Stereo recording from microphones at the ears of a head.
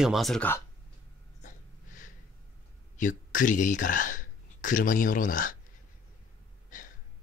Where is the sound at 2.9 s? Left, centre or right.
Left.